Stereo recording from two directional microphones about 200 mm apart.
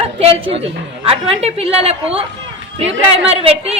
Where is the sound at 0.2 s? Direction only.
30° right (ahead or behind).